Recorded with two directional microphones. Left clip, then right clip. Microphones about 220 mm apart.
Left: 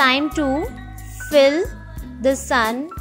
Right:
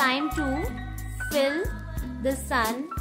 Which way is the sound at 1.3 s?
30° left (ahead or behind).